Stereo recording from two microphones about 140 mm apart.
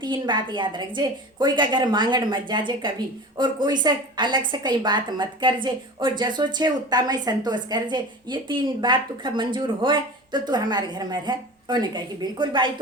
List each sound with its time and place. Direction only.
0.0 s speech: 35° right (ahead or behind)